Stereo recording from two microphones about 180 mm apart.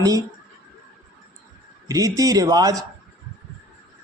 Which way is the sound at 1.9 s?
20° right (ahead or behind).